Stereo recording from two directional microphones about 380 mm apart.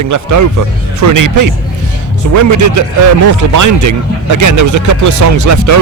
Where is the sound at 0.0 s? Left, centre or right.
Right.